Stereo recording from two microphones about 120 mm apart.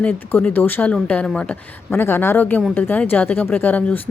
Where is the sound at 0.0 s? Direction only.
15° left (ahead or behind).